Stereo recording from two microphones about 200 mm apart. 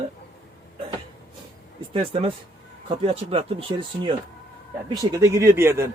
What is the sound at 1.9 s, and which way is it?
A man's voice, 30° right (ahead or behind).